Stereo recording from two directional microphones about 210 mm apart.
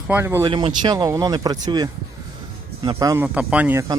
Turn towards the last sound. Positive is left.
turn(degrees=-10)  # may be behind; listen again after turning